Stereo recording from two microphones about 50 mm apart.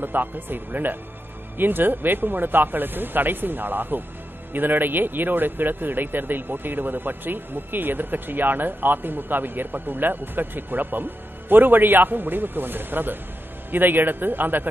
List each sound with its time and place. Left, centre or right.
0.0 s speech: right